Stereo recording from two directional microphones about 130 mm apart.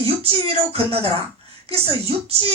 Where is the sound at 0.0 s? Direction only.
45° right (ahead or behind).